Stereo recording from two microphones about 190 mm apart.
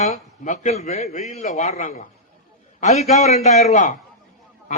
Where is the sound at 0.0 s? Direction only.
35° left (ahead or behind).